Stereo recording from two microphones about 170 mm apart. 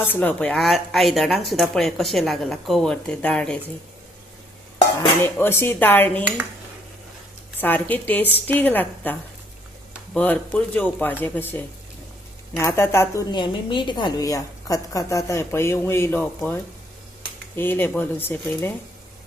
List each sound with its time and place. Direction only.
0.1 s a woman's voice: 10° left (ahead or behind)
5.2 s a woman's voice: 15° left (ahead or behind)
7.6 s a woman's voice: 10° left (ahead or behind)
10.2 s a woman's voice: 10° left (ahead or behind)
13.3 s a woman's voice: 25° left (ahead or behind); by 16.6 s 10° left (ahead or behind)
17.6 s a woman's voice: 10° left (ahead or behind)